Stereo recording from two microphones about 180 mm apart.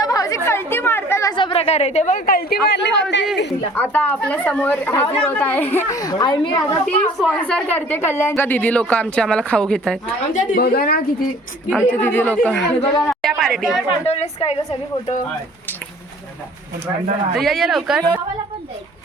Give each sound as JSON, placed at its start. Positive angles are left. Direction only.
{"t": 0.0, "sound": "chatter", "side_deg": 20}
{"t": 2.6, "sound": "speech", "side_deg": 70}
{"t": 3.8, "sound": "a woman's voice", "side_deg": 10}
{"t": 7.0, "sound": "a woman's voice", "side_deg": 5}
{"t": 10.3, "sound": "a woman's voice", "side_deg": 55}
{"t": 11.7, "sound": "a woman's voice", "side_deg": 10}
{"t": 13.8, "sound": "a woman's voice", "side_deg": 35}
{"t": 17.3, "sound": "speech", "side_deg": 0}